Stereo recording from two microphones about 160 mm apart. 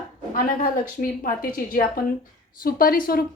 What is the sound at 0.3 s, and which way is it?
A woman's voice, 60° left (ahead or behind).